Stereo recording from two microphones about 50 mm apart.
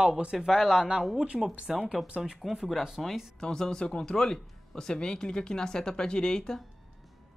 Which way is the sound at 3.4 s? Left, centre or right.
Centre.